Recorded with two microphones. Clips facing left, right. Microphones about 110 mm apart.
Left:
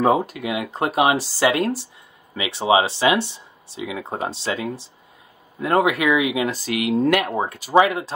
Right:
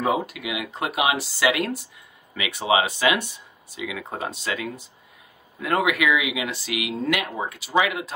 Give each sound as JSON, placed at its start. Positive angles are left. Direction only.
{"t": 0.0, "sound": "speech", "side_deg": 40}